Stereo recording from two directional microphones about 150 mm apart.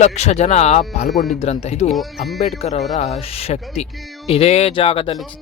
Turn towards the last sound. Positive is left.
turn(degrees=40)  # may be behind; listen again after turning